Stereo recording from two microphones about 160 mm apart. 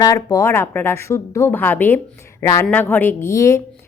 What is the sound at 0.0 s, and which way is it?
Speech, 25° left (ahead or behind).